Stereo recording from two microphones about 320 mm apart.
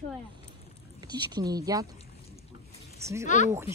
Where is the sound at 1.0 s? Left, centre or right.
Centre.